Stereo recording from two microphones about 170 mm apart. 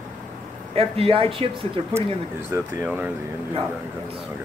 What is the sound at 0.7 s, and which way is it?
Speech, 35° right (ahead or behind).